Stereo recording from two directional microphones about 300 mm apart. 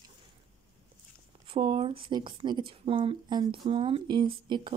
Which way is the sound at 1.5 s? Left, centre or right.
Centre.